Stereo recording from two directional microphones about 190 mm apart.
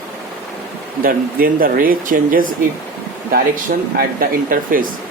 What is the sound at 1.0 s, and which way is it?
Speech, 50° right (ahead or behind).